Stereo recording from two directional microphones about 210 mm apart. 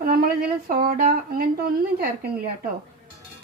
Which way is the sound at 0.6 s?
45° right (ahead or behind).